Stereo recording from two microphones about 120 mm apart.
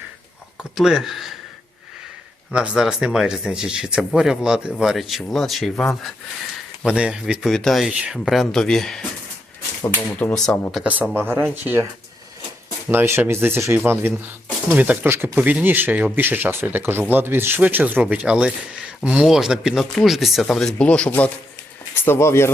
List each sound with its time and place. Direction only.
0.8 s speech: centre (ahead or behind)
2.5 s speech: 5° right (ahead or behind)
10.2 s speech: 10° left (ahead or behind)
10.8 s speech: 15° right (ahead or behind)
12.9 s speech: 20° right (ahead or behind); by 22.5 s 20° left (ahead or behind)